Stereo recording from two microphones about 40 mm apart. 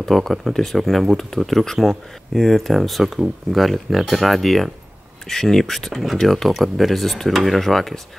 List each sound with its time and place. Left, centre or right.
0.0 s speech: centre